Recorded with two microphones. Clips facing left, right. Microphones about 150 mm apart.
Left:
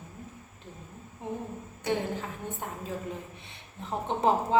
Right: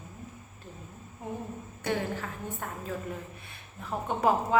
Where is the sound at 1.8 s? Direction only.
20° left (ahead or behind).